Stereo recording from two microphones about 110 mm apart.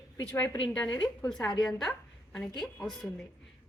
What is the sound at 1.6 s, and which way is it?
A woman's voice, 5° left (ahead or behind).